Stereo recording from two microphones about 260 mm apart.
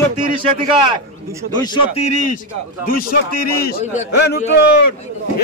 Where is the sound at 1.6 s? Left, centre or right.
Centre.